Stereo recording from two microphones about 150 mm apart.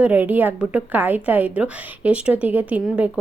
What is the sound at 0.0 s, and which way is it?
A woman's voice, 10° right (ahead or behind).